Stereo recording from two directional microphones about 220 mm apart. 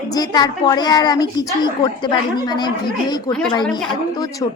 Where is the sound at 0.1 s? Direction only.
20° left (ahead or behind).